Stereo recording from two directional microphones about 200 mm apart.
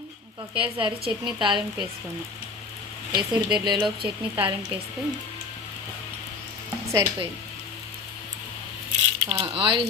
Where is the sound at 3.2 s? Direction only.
25° right (ahead or behind).